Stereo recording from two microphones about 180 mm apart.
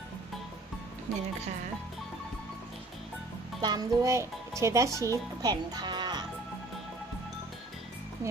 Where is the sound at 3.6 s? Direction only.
20° right (ahead or behind).